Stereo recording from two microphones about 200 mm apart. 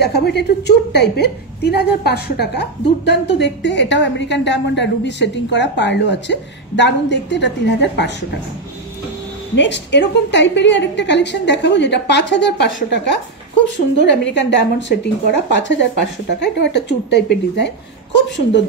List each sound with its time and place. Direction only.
0.0 s a woman's voice: 55° left (ahead or behind)
9.6 s a woman's voice: 60° left (ahead or behind)